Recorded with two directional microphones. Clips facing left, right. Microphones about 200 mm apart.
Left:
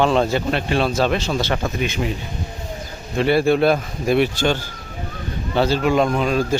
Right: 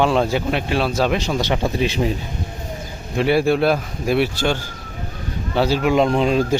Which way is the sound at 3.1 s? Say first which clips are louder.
Even; 10° right (ahead or behind).